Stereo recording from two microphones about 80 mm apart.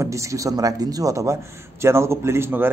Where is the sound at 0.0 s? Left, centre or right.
Right.